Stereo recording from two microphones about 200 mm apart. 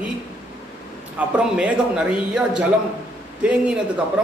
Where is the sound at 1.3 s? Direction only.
5° right (ahead or behind).